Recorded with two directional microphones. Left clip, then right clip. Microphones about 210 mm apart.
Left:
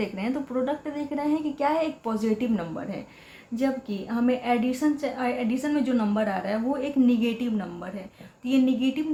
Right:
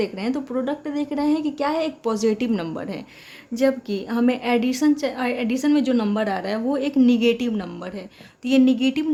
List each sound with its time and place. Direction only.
0.0 s a woman's voice: 35° right (ahead or behind); by 9.0 s 55° right (ahead or behind)